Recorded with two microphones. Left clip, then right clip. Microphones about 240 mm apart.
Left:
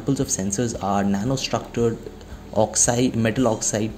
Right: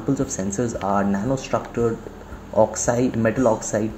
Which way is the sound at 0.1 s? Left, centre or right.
Left.